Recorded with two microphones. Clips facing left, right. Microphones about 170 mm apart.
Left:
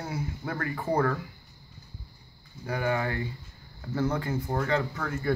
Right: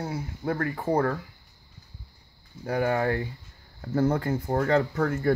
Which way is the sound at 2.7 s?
45° right (ahead or behind).